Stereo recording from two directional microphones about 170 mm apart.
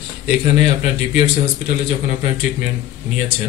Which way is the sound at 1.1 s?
40° left (ahead or behind).